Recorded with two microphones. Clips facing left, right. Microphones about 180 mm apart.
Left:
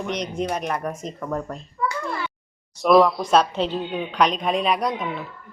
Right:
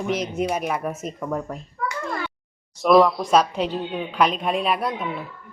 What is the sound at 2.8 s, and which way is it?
Speech, centre (ahead or behind).